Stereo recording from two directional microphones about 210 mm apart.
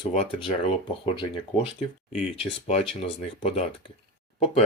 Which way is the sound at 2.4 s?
30° left (ahead or behind).